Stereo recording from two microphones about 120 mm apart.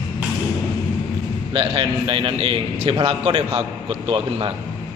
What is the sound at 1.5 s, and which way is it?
A man's voice, 45° right (ahead or behind).